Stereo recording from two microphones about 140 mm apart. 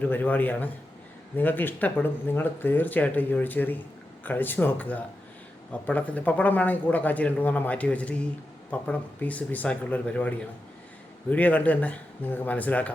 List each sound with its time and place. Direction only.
0.0 s speech: 10° left (ahead or behind)